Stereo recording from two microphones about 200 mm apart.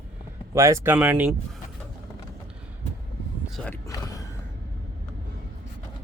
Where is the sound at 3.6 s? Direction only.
15° left (ahead or behind).